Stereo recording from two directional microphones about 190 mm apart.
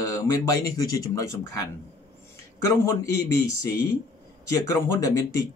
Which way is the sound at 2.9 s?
15° left (ahead or behind).